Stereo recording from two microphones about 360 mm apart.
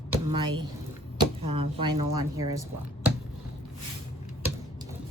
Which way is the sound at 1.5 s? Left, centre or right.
Centre.